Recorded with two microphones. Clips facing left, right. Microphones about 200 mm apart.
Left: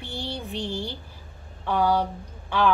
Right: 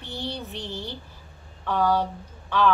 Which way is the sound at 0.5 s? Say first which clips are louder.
Left 4 dB; 15° left (ahead or behind).